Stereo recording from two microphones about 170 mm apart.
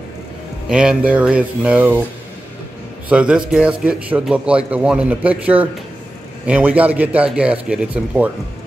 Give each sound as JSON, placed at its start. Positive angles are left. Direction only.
{"t": 0.7, "sound": "a man's voice", "side_deg": -5}
{"t": 3.1, "sound": "a man's voice", "side_deg": -5}